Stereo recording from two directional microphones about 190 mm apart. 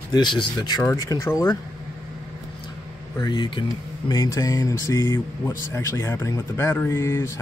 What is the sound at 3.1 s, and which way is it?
Speech, 20° left (ahead or behind).